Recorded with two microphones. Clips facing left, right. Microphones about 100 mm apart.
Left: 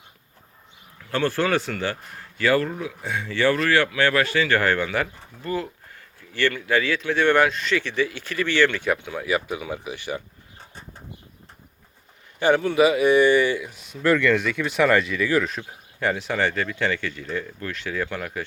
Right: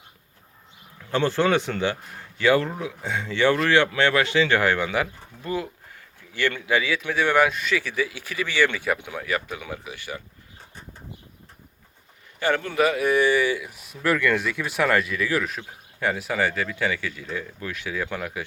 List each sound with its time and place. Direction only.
1.1 s speech: 20° right (ahead or behind)
6.7 s speech: 10° right (ahead or behind)
9.1 s speech: 10° left (ahead or behind)
12.4 s speech: 15° left (ahead or behind)
12.6 s speech: 5° left (ahead or behind)